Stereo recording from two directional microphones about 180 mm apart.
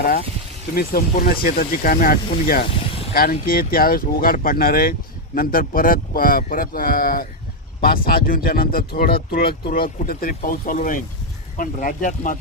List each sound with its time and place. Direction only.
0.7 s speech: 55° left (ahead or behind)